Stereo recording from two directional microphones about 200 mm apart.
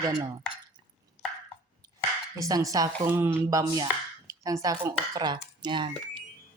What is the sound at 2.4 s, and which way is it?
Speech, 20° right (ahead or behind).